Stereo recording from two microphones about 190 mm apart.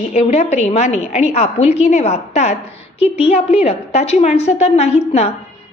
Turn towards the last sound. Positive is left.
turn(degrees=35)  # may be behind; listen again after turning